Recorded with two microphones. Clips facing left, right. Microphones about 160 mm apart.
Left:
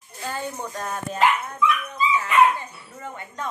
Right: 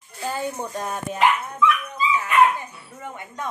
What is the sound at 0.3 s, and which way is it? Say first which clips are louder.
Speech: right 3 dB; 10° right (ahead or behind).